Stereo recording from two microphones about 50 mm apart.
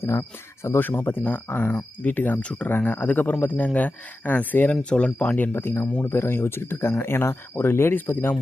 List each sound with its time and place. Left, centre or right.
0.0 s speech: left
0.8 s speech: left
2.4 s speech: left
2.6 s speech: left
4.7 s speech: left
5.4 s speech: left